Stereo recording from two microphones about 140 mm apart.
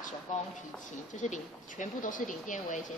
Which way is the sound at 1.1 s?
60° left (ahead or behind).